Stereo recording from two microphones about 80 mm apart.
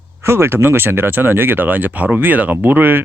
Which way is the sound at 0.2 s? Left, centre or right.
Right.